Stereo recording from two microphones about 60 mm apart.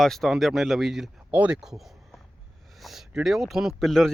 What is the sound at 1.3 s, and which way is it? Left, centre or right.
Speech, right.